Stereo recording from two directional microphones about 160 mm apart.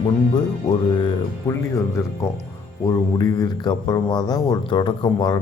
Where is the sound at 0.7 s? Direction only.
30° left (ahead or behind).